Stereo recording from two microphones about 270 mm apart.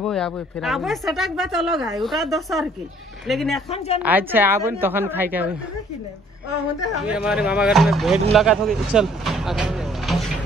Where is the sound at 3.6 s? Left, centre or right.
Left.